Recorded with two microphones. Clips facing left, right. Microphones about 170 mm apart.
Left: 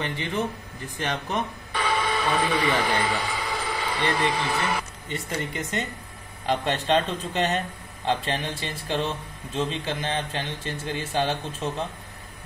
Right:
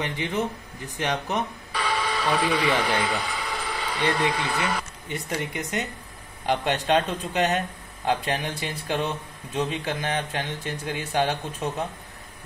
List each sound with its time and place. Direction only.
0.0 s a man's voice: 15° right (ahead or behind)
1.7 s a sound: centre (ahead or behind)
4.5 s a man's voice: 5° left (ahead or behind)
5.1 s a man's voice: 10° right (ahead or behind)